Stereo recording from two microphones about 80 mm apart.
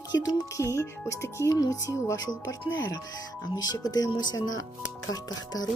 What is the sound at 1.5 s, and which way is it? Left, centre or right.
Speech, left.